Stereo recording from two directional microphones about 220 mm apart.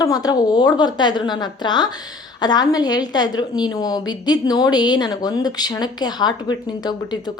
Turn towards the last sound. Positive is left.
turn(degrees=20)  # may be behind; listen again after turning